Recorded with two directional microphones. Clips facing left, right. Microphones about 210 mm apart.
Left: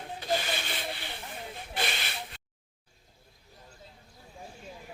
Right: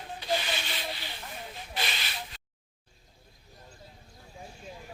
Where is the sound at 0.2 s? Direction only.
50° left (ahead or behind).